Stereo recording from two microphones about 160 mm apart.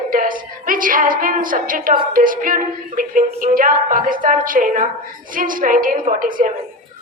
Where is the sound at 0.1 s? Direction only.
60° right (ahead or behind).